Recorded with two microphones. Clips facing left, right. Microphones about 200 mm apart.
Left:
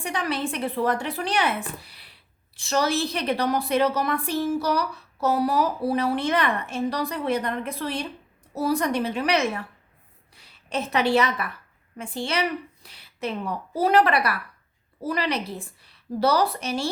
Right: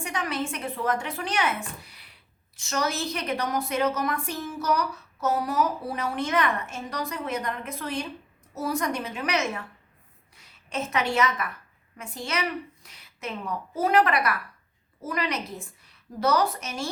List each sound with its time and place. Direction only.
0.0 s a woman's voice: 35° left (ahead or behind)